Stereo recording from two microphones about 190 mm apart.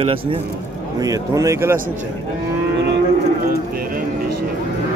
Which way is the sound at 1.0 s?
20° right (ahead or behind).